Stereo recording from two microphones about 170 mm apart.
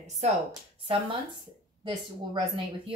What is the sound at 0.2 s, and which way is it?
Speech, 40° right (ahead or behind).